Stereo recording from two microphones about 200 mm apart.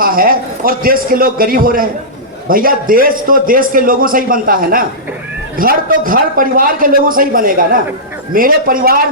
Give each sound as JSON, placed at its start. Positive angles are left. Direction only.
{"t": 0.0, "sound": "a man's voice", "side_deg": -45}